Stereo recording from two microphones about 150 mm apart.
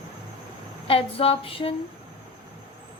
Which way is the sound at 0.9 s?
40° left (ahead or behind).